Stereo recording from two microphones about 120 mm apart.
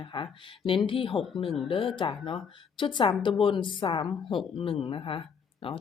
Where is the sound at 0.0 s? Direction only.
45° left (ahead or behind).